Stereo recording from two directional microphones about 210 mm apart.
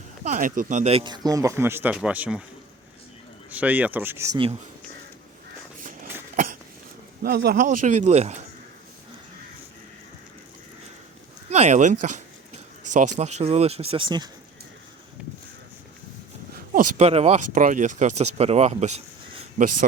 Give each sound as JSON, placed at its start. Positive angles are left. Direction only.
{"t": 0.3, "sound": "speech", "side_deg": -40}
{"t": 3.5, "sound": "speech", "side_deg": -5}
{"t": 6.3, "sound": "cough", "side_deg": -40}
{"t": 7.2, "sound": "speech", "side_deg": -45}
{"t": 11.4, "sound": "speech", "side_deg": -35}
{"t": 16.6, "sound": "a sound", "side_deg": -40}
{"t": 17.0, "sound": "speech", "side_deg": -30}